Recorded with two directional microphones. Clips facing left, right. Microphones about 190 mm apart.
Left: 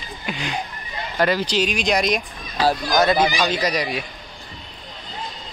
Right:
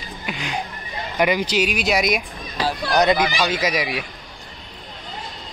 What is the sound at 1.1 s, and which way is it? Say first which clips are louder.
Speech: even; 15° right (ahead or behind).